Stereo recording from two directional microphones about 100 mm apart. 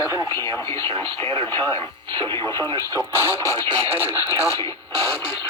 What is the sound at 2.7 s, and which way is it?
Speech, 40° right (ahead or behind).